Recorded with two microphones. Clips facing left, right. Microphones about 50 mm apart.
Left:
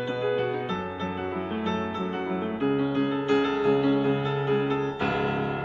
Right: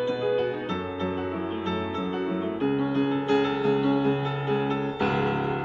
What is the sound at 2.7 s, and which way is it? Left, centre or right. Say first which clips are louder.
Music: even; left.